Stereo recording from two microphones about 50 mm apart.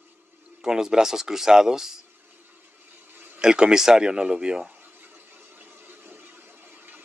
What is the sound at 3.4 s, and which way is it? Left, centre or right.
Speech, centre.